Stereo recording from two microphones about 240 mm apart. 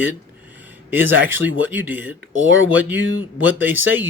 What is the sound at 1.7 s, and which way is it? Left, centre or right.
Speech, centre.